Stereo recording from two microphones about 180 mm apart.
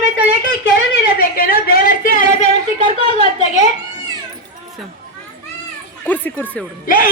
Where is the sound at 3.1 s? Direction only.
35° left (ahead or behind).